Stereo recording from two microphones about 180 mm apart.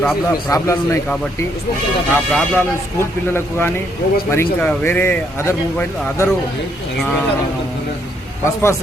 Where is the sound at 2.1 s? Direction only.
10° left (ahead or behind).